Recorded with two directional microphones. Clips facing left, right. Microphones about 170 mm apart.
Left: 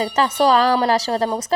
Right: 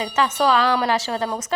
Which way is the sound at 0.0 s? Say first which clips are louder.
Left 3 dB; 35° left (ahead or behind).